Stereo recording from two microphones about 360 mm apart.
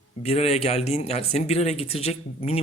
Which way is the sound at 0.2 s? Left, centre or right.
Centre.